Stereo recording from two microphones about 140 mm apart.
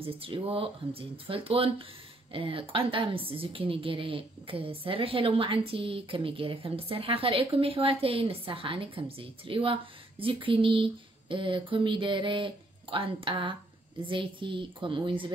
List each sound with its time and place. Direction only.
0.0 s a woman's voice: 40° right (ahead or behind)